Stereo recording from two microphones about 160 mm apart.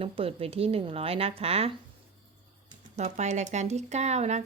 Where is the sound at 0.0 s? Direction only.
35° right (ahead or behind).